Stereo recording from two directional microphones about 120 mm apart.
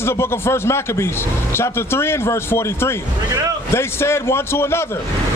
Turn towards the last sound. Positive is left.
turn(degrees=20)  # may be behind; listen again after turning